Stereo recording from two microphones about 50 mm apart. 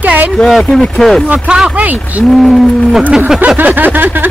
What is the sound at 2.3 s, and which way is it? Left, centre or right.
Speech, centre.